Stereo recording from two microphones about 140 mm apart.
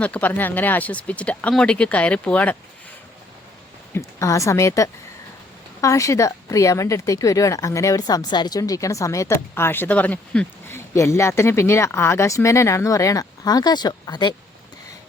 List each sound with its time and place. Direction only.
0.0 s speech: 10° left (ahead or behind)
3.9 s speech: 20° left (ahead or behind)